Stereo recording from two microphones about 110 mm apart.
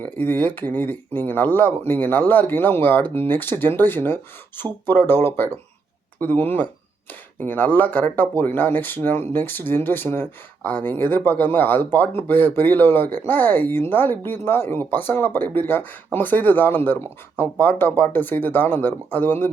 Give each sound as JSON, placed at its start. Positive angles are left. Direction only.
{"t": 0.0, "sound": "speech", "side_deg": 15}